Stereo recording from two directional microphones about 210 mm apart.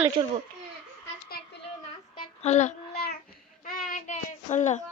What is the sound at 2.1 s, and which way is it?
Child singing, 35° left (ahead or behind).